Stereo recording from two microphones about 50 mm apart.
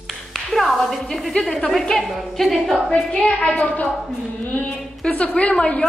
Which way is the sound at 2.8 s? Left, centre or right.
Centre.